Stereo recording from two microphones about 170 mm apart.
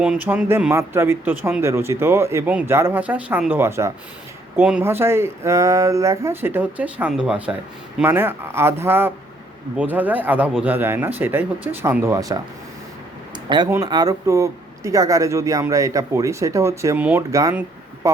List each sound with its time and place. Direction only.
0.0 s speech: 5° right (ahead or behind)
13.3 s a sound: 25° right (ahead or behind)
13.7 s speech: 20° right (ahead or behind)